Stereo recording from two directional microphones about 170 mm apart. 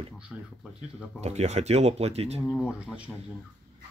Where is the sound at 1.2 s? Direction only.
40° right (ahead or behind).